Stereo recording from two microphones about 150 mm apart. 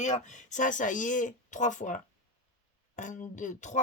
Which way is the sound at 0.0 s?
55° left (ahead or behind).